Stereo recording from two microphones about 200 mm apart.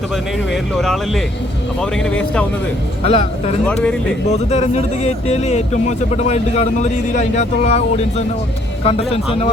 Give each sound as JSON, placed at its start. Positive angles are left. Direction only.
{"t": 0.5, "sound": "speech", "side_deg": 0}
{"t": 3.0, "sound": "a man's voice", "side_deg": 30}
{"t": 3.7, "sound": "speech", "side_deg": 5}
{"t": 4.3, "sound": "a man's voice", "side_deg": 35}